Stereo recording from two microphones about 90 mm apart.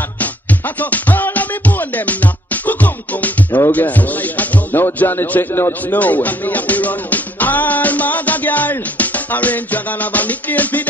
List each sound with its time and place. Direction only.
0.7 s music: 20° left (ahead or behind)